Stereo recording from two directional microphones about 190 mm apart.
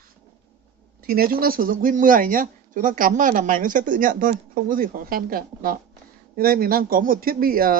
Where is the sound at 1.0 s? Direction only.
50° right (ahead or behind).